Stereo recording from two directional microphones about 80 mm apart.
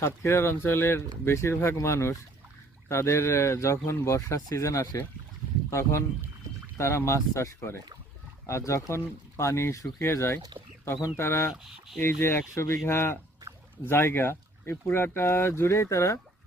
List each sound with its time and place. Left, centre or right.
0.0 s speech: left